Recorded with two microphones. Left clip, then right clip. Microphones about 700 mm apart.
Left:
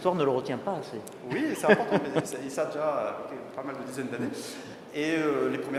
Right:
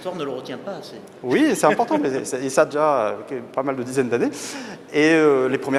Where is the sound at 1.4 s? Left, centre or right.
Right.